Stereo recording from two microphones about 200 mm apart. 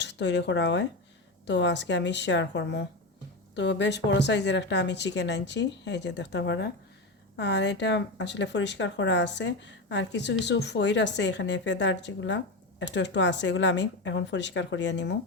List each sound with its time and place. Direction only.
0.0 s speech: 60° left (ahead or behind)